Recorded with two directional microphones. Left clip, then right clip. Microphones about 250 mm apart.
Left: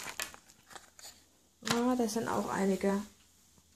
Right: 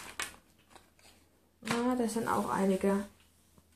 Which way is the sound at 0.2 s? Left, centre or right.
Left.